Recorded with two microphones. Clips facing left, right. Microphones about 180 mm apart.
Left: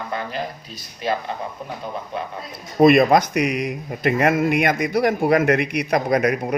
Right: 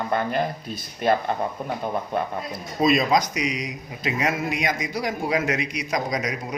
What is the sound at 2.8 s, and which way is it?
A man's voice, 60° left (ahead or behind).